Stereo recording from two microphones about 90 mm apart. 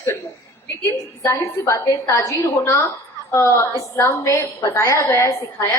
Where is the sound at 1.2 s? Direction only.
35° left (ahead or behind).